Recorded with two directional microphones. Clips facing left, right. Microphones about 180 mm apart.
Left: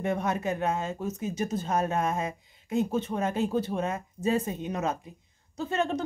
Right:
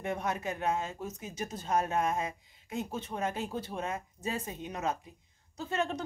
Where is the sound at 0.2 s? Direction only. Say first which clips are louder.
Left 5 dB; 25° left (ahead or behind).